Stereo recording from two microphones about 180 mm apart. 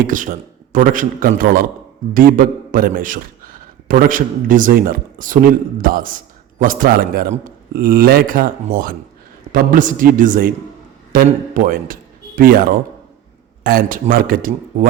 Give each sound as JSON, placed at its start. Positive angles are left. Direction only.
{"t": 0.0, "sound": "a man's voice", "side_deg": -45}